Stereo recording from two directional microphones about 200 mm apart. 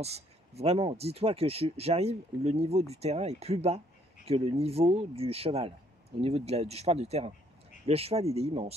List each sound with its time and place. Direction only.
0.0 s speech: 30° right (ahead or behind)